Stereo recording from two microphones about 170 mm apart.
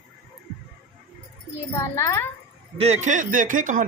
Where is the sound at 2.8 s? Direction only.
40° right (ahead or behind).